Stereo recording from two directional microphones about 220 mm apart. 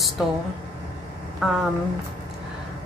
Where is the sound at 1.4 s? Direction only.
Centre (ahead or behind).